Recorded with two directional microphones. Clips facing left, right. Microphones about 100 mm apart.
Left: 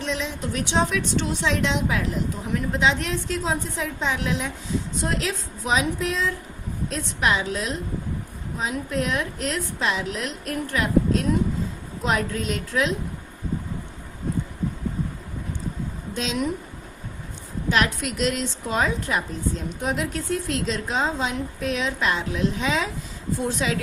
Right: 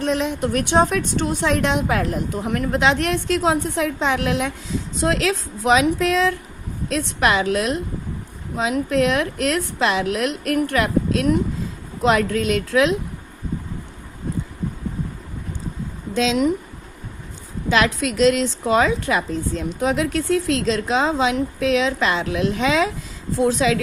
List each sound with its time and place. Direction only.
0.0 s a woman's voice: 50° right (ahead or behind); by 4.5 s 70° right (ahead or behind)
4.9 s a woman's voice: 90° right; by 7.8 s 70° right (ahead or behind)
8.5 s a woman's voice: 85° right
16.1 s a woman's voice: 90° right
17.7 s a woman's voice: 90° right